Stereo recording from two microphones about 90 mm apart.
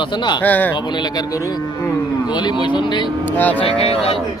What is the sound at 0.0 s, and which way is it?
Speech, 60° left (ahead or behind).